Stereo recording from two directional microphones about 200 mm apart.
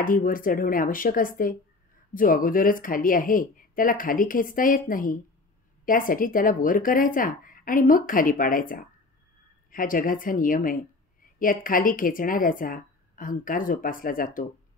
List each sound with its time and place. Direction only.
0.0 s a woman's voice: 45° left (ahead or behind)